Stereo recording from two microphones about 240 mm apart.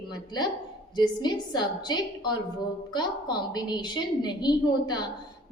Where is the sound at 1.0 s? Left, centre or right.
Centre.